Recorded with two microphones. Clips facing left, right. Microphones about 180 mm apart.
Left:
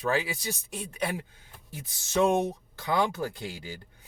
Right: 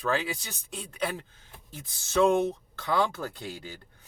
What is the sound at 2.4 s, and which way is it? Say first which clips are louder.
Speech: right 2 dB; 15° left (ahead or behind).